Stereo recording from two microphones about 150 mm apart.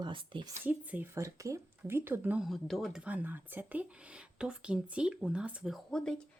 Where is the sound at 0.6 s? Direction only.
10° right (ahead or behind).